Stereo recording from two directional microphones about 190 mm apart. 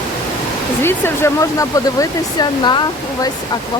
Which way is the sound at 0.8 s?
10° left (ahead or behind).